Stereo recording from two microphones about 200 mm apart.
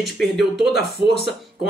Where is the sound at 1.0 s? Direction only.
20° left (ahead or behind).